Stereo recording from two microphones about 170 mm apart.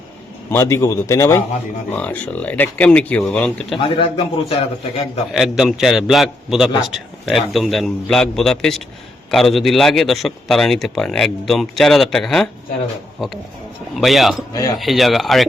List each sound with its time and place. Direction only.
0.5 s speech: 15° left (ahead or behind)
3.8 s a man's voice: 30° left (ahead or behind)
5.3 s a man's voice: centre (ahead or behind)
13.9 s a man's voice: centre (ahead or behind)
14.5 s speech: 20° left (ahead or behind)
14.8 s a man's voice: centre (ahead or behind)